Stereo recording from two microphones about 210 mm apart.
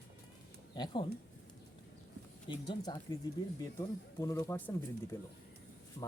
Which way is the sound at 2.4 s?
20° left (ahead or behind).